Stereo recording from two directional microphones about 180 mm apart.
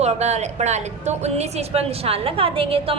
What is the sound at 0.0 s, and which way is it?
A woman's voice, 35° right (ahead or behind).